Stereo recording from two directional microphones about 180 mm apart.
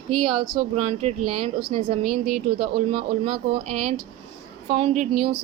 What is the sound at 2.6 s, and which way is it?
A woman's voice, 30° right (ahead or behind).